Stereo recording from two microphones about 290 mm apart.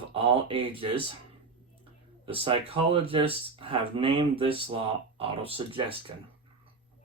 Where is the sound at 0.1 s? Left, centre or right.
Centre.